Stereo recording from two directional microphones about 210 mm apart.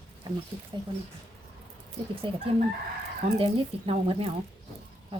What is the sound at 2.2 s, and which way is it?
Speech, 25° right (ahead or behind).